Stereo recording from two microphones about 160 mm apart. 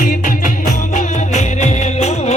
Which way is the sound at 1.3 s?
45° left (ahead or behind).